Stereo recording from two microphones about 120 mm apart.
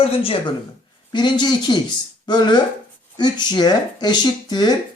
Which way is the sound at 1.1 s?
40° left (ahead or behind).